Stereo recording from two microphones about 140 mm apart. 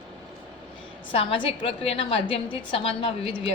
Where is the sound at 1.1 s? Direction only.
40° left (ahead or behind).